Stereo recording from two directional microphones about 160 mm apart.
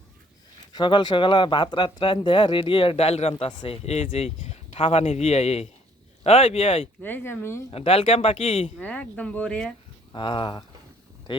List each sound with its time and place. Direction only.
0.7 s speech: 30° left (ahead or behind)
7.0 s speech: 10° left (ahead or behind)
7.7 s speech: 35° left (ahead or behind)
8.8 s speech: 10° left (ahead or behind)
10.1 s speech: 30° left (ahead or behind)